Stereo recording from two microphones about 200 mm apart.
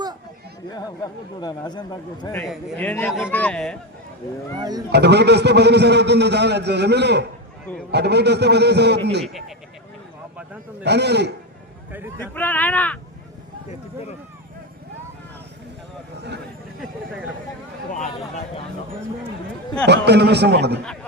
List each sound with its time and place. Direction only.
1.4 s a man's voice: 20° left (ahead or behind)
2.3 s speech: 5° left (ahead or behind)
4.9 s a man's voice: 55° right (ahead or behind)
10.3 s a man's voice: 5° right (ahead or behind)
10.8 s a man's voice: 55° right (ahead or behind)
11.9 s a man's voice: 10° right (ahead or behind)
12.2 s speech: 10° left (ahead or behind)
19.8 s a man's voice: 55° right (ahead or behind)